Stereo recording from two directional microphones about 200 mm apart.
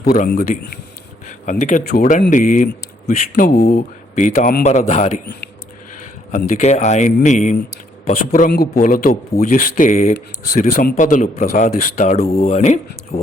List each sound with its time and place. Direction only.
0.0 s a man's voice: 45° left (ahead or behind)
6.3 s speech: 35° left (ahead or behind)